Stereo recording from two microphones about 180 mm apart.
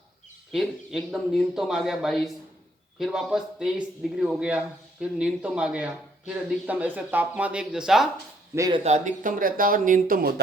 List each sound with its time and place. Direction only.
0.5 s speech: centre (ahead or behind)
8.5 s speech: 20° right (ahead or behind)
8.8 s speech: 40° right (ahead or behind)